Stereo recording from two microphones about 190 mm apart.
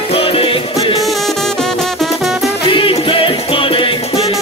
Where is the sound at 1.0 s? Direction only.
Centre (ahead or behind).